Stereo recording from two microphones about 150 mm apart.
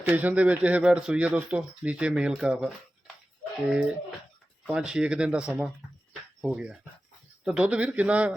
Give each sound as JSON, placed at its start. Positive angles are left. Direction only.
{"t": 0.0, "sound": "speech", "side_deg": -10}